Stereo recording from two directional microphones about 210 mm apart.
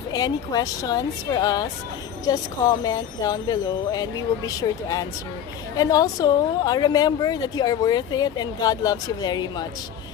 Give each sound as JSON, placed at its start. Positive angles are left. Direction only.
{"t": 0.1, "sound": "a woman's voice", "side_deg": 20}